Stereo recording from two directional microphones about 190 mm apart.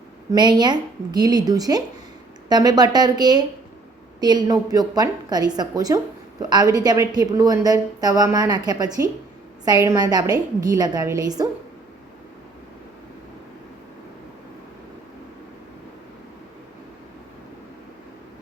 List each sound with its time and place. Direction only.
0.3 s a woman's voice: 20° right (ahead or behind)